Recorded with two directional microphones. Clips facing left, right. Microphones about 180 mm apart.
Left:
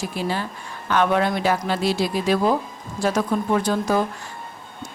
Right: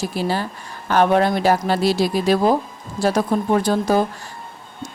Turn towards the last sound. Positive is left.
turn(degrees=-35)  # may be behind; listen again after turning